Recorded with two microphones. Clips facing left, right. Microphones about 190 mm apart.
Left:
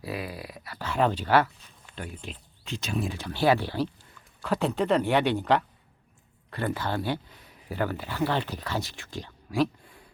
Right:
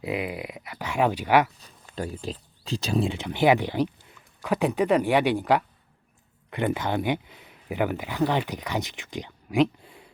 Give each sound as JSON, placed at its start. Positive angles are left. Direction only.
{"t": 0.0, "sound": "speech", "side_deg": -20}
{"t": 1.5, "sound": "a sound", "side_deg": -40}
{"t": 2.1, "sound": "speech", "side_deg": -35}